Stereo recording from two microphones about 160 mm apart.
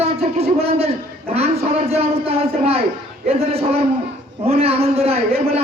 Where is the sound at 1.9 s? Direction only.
40° right (ahead or behind).